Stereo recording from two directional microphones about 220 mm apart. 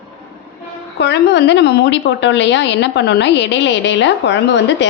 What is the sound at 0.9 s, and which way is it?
A woman's voice, 50° left (ahead or behind).